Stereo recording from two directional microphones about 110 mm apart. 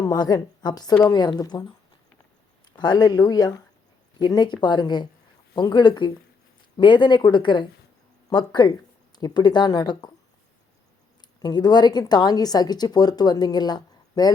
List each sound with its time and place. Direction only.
0.0 s a woman's voice: 35° left (ahead or behind)
2.7 s a woman's voice: 40° left (ahead or behind)
11.4 s a woman's voice: 40° left (ahead or behind)